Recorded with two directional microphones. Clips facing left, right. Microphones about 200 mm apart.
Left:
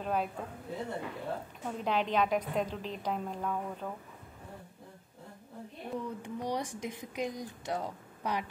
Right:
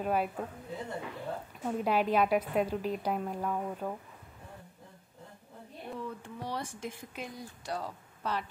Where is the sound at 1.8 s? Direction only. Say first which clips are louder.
Right 2 dB; 5° right (ahead or behind).